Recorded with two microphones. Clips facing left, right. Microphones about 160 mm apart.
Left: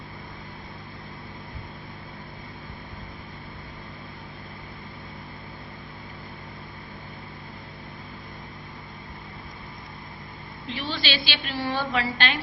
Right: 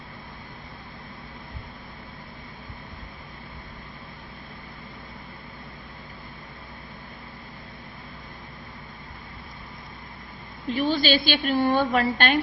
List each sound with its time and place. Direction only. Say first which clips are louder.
10.7 s a woman's voice: right 8 dB; 45° right (ahead or behind)